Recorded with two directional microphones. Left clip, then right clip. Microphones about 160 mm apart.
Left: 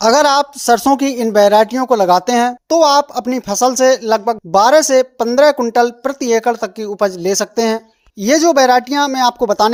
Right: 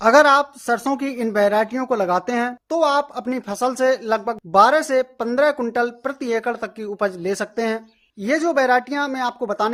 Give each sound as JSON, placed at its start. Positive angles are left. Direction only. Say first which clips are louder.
{"t": 0.0, "sound": "speech", "louder": "left 2 dB", "side_deg": 40}